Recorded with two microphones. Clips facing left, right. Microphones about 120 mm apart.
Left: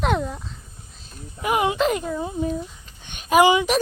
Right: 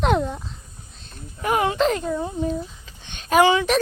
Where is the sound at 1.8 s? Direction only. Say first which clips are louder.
Right 1 dB; 5° left (ahead or behind).